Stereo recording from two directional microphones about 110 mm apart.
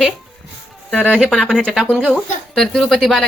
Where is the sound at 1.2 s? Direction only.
5° right (ahead or behind).